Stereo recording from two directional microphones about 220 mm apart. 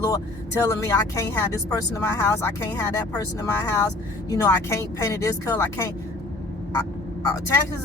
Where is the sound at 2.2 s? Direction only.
10° left (ahead or behind).